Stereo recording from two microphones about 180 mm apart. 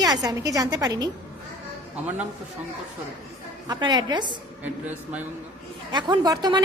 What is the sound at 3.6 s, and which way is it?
Speech, 25° right (ahead or behind).